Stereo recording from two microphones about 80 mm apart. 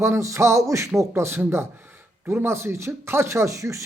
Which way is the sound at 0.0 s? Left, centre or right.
Right.